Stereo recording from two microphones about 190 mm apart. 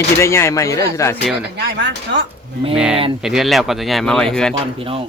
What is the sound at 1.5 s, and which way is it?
Speech, 60° right (ahead or behind).